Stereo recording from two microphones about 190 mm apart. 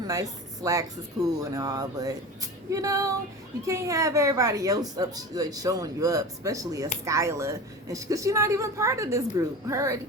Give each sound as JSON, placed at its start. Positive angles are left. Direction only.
{"t": 0.1, "sound": "a woman's voice", "side_deg": -20}